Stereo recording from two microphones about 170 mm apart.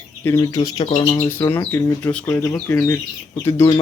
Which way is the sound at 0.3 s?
25° left (ahead or behind).